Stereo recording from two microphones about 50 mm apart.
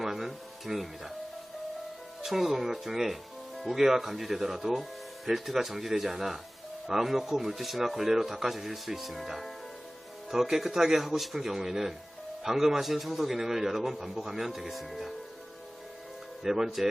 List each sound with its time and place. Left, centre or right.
0.0 s music: centre
2.2 s speech: centre
16.4 s speech: centre